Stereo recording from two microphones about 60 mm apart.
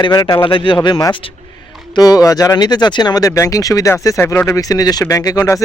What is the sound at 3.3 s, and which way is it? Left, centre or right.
Speech, left.